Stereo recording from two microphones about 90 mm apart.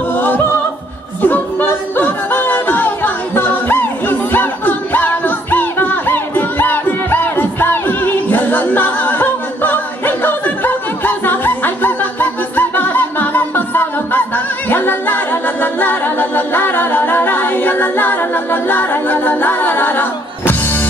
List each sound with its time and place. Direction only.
0.1 s music: 20° left (ahead or behind)